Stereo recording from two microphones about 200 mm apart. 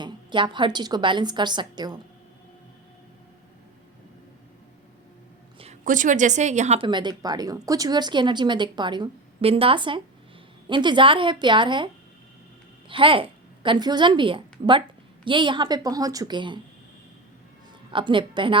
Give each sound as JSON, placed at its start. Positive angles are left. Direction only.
{"t": 0.0, "sound": "a woman's voice", "side_deg": -25}
{"t": 5.5, "sound": "a woman's voice", "side_deg": -35}
{"t": 12.9, "sound": "a woman's voice", "side_deg": -25}
{"t": 17.9, "sound": "a woman's voice", "side_deg": -25}